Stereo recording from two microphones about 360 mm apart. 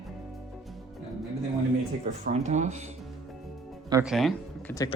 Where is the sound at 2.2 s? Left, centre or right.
Centre.